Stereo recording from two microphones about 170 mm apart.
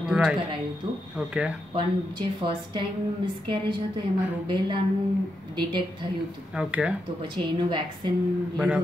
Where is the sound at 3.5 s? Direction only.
25° right (ahead or behind).